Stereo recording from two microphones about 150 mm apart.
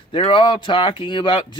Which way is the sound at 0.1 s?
35° left (ahead or behind).